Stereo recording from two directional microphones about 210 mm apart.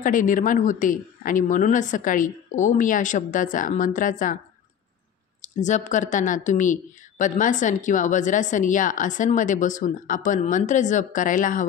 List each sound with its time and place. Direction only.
0.0 s speech: 40° left (ahead or behind)
5.4 s speech: 35° left (ahead or behind)